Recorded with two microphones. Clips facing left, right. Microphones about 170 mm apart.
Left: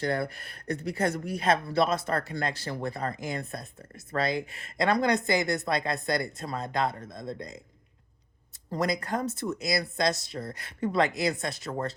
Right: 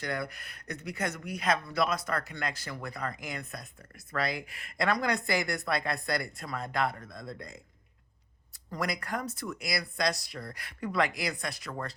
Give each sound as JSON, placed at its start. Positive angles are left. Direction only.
{"t": 0.0, "sound": "speech", "side_deg": 30}
{"t": 8.7, "sound": "speech", "side_deg": 25}